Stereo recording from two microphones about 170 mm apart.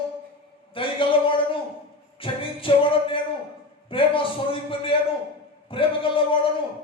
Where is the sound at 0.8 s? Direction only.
30° left (ahead or behind).